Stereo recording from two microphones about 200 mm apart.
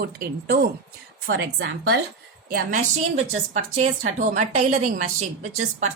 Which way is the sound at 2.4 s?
45° right (ahead or behind).